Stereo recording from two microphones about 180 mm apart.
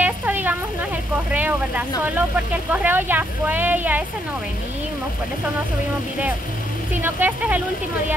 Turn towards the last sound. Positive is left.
turn(degrees=-10)  # may be behind; listen again after turning